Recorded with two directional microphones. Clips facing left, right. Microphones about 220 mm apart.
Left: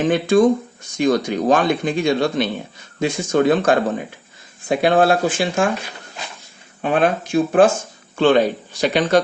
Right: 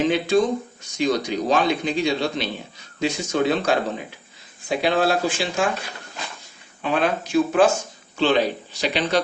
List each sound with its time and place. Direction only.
0.0 s speech: 50° left (ahead or behind)
6.8 s speech: 50° left (ahead or behind)